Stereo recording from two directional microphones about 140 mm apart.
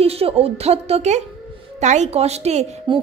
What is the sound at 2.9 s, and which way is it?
Speech, 35° right (ahead or behind).